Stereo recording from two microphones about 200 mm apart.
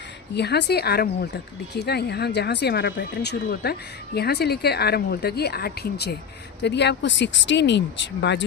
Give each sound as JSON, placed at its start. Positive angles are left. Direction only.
{"t": 0.3, "sound": "a woman's voice", "side_deg": 55}